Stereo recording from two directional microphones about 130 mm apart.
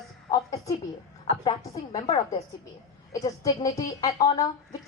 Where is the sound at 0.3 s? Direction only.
25° left (ahead or behind).